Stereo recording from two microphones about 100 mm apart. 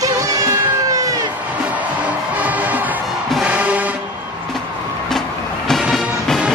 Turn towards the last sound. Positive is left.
turn(degrees=5)  # may be behind; listen again after turning